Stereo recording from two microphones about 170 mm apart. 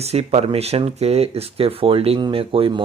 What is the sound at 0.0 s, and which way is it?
Speech, 40° right (ahead or behind).